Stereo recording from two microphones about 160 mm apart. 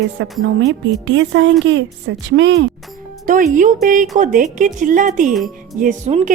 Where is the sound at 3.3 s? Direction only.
55° right (ahead or behind).